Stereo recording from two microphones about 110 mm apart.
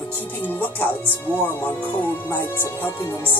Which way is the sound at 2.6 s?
20° left (ahead or behind).